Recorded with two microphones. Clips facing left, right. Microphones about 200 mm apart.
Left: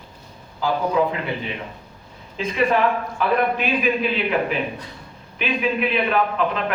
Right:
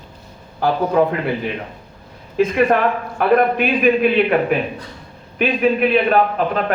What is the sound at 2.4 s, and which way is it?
Speech, 60° right (ahead or behind).